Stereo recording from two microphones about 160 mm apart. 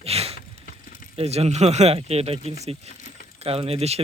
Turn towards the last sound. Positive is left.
turn(degrees=-40)  # may be behind; listen again after turning